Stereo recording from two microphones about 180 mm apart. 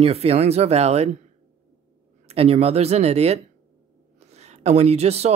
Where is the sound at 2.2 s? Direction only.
35° right (ahead or behind).